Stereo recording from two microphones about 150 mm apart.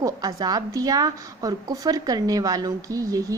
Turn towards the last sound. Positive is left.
turn(degrees=-20)  # may be behind; listen again after turning